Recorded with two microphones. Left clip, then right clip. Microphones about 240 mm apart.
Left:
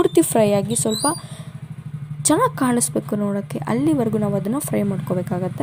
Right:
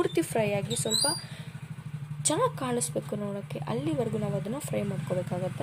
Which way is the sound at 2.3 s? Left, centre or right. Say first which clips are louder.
Left 10 dB; left.